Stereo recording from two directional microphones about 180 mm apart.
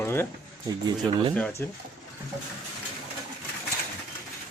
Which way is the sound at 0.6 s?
25° right (ahead or behind).